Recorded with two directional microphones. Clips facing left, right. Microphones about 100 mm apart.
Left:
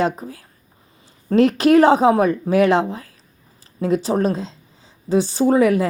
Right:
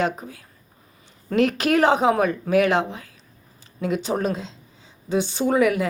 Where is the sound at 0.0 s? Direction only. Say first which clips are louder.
Left 3 dB; 35° left (ahead or behind).